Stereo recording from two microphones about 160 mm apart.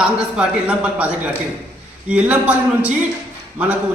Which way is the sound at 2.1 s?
10° right (ahead or behind).